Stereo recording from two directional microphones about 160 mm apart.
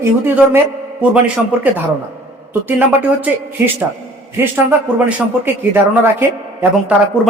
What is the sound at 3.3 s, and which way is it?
A man's voice, 10° right (ahead or behind).